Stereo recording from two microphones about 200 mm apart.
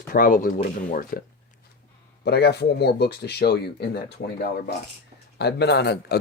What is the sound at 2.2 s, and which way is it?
Speech, 55° left (ahead or behind).